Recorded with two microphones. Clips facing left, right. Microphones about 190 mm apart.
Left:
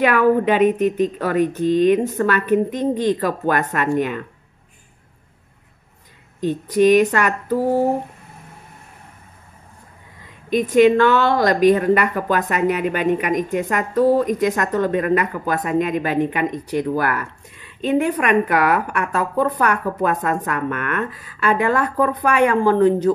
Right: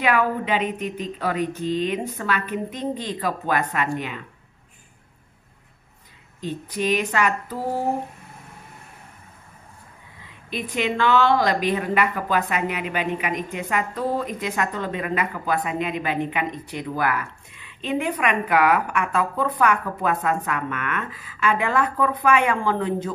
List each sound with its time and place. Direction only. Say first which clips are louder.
0.0 s a woman's voice: left 7 dB; 45° left (ahead or behind)
6.4 s a woman's voice: left 11 dB; 45° left (ahead or behind)
10.5 s a woman's voice: left 12 dB; 45° left (ahead or behind)